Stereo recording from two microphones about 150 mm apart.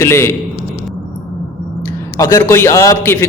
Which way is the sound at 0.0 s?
15° left (ahead or behind).